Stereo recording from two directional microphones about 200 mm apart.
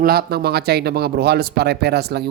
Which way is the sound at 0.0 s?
50° right (ahead or behind).